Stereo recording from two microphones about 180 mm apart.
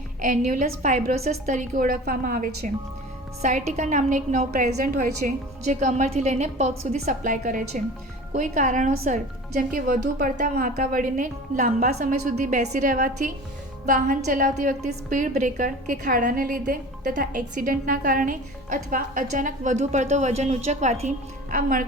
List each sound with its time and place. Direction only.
0.2 s a woman's voice: 45° right (ahead or behind)
21.5 s a woman's voice: 50° right (ahead or behind)